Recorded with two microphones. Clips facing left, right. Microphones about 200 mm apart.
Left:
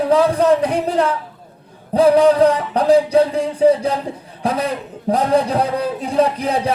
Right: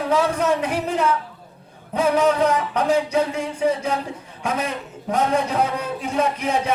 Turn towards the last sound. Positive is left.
turn(degrees=35)  # may be behind; listen again after turning